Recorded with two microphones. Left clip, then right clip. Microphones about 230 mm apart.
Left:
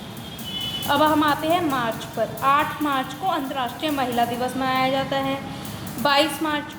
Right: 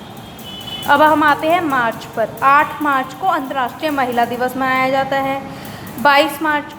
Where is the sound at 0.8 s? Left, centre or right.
Centre.